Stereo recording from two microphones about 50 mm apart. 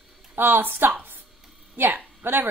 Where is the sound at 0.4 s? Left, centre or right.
Right.